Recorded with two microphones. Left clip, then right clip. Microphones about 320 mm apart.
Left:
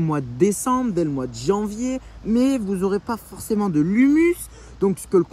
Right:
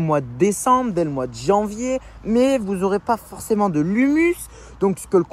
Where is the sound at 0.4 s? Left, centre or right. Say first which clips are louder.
Right 2 dB; centre.